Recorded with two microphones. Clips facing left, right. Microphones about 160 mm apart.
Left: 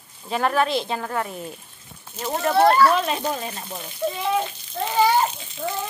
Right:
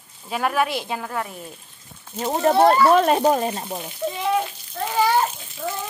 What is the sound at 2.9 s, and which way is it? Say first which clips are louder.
Speech: right 7 dB; 50° right (ahead or behind).